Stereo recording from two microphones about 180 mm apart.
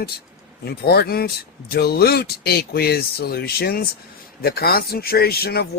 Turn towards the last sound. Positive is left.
turn(degrees=60)  # may be behind; listen again after turning